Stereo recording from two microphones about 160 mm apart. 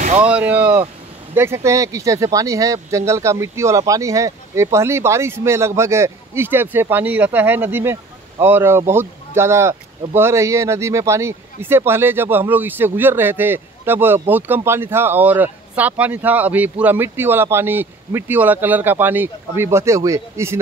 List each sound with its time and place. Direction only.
0.2 s speech: 10° right (ahead or behind)